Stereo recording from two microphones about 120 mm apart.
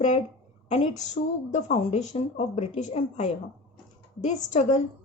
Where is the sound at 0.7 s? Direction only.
70° left (ahead or behind).